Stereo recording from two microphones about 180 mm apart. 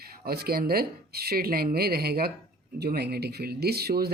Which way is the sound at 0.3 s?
60° right (ahead or behind).